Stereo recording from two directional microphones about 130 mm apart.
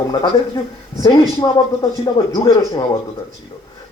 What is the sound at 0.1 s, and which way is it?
Speech, 35° left (ahead or behind).